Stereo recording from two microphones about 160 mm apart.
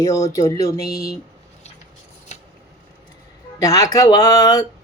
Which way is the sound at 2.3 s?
45° left (ahead or behind).